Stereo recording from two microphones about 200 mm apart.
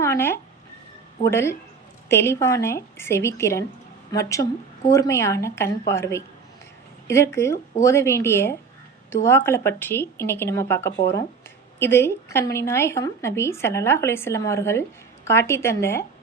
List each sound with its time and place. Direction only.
0.0 s speech: 10° left (ahead or behind)